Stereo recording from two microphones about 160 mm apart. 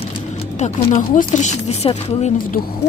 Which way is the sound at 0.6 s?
50° left (ahead or behind).